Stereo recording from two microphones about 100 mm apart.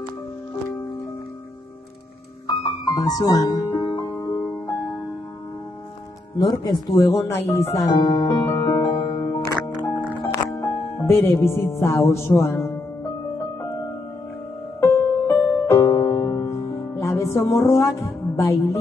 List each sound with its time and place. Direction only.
2.4 s music: 45° left (ahead or behind)
4.2 s music: 30° left (ahead or behind)
6.5 s music: 35° left (ahead or behind)
8.0 s music: 45° left (ahead or behind)
10.3 s music: 35° left (ahead or behind)
11.0 s music: 25° left (ahead or behind)
14.8 s music: 25° left (ahead or behind)
15.9 s music: 40° left (ahead or behind)